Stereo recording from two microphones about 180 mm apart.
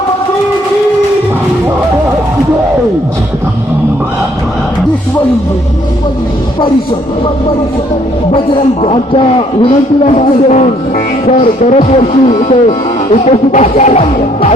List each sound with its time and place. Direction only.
8.8 s a man's voice: 30° left (ahead or behind)